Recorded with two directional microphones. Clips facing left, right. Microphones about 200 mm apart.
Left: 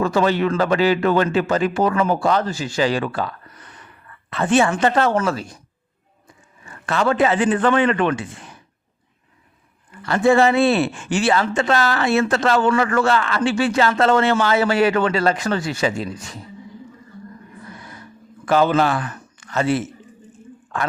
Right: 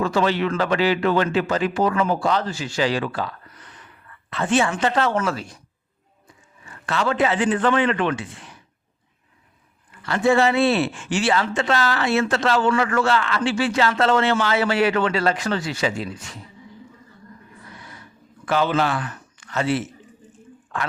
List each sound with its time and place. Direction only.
0.0 s speech: 45° left (ahead or behind)
4.3 s speech: 50° left (ahead or behind)
6.8 s speech: 50° left (ahead or behind)
10.1 s speech: 45° left (ahead or behind)
18.4 s a man's voice: 45° left (ahead or behind)